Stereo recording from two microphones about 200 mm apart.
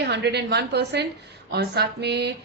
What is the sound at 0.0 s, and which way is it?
Speech, 55° right (ahead or behind).